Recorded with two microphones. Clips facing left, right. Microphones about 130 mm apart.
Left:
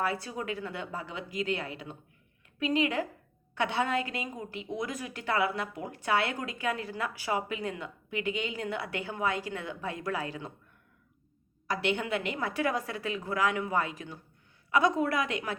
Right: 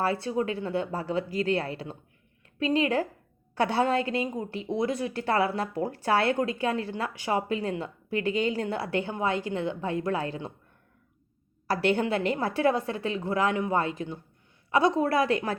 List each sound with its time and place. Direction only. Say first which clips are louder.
0.0 s a woman's voice: right 6 dB; 30° right (ahead or behind)
11.7 s a woman's voice: right 5 dB; 40° right (ahead or behind)